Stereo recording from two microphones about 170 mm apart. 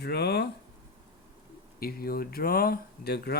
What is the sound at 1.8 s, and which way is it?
Speech, 65° left (ahead or behind).